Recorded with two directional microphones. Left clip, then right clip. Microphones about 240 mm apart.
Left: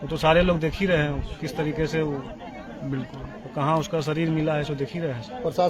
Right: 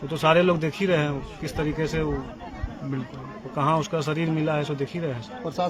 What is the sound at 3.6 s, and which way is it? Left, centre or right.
Speech, centre.